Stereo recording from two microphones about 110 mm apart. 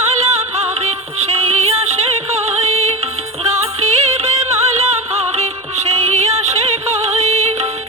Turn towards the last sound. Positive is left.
turn(degrees=-80)